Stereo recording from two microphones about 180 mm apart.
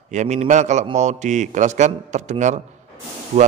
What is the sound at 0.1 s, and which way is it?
A man's voice, 40° right (ahead or behind).